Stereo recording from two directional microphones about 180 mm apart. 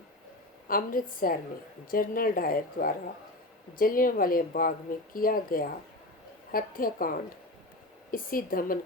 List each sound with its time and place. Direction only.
0.7 s speech: 50° left (ahead or behind)